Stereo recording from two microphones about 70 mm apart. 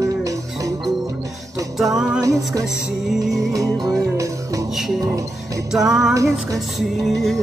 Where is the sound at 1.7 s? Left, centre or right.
Centre.